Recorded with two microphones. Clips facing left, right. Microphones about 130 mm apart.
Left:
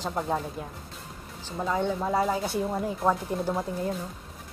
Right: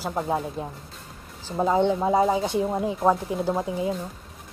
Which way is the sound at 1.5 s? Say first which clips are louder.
Right 7 dB; 35° right (ahead or behind).